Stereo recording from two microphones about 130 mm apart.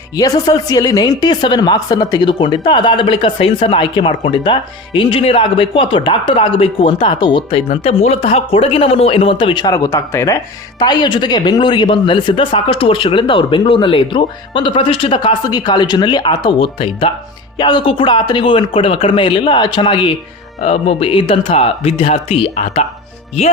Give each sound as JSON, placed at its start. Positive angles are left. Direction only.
{"t": 0.2, "sound": "speech", "side_deg": 30}
{"t": 7.7, "sound": "speech", "side_deg": 55}
{"t": 10.8, "sound": "speech", "side_deg": 35}
{"t": 20.6, "sound": "speech", "side_deg": 55}